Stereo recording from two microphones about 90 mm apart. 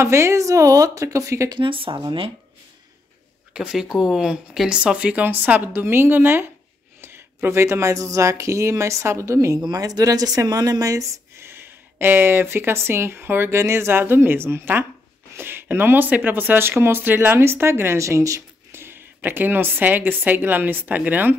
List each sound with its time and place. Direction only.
0.0 s speech: 30° right (ahead or behind)
1.6 s speech: 75° right (ahead or behind)
2.0 s speech: 90° right
3.5 s speech: 10° right (ahead or behind); by 9.6 s 35° right (ahead or behind)
9.6 s speech: 45° right (ahead or behind); by 21.4 s 20° right (ahead or behind)